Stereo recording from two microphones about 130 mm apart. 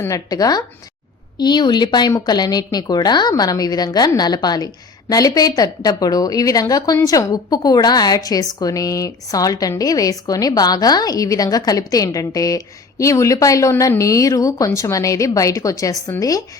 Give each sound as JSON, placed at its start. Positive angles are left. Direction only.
{"t": 0.0, "sound": "a woman's voice", "side_deg": 25}